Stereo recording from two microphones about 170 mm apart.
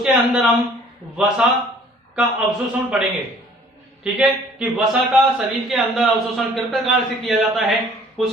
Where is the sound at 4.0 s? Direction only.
5° right (ahead or behind).